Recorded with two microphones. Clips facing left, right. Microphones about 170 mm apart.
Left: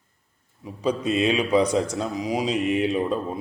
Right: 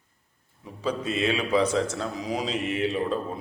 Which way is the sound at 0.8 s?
20° left (ahead or behind).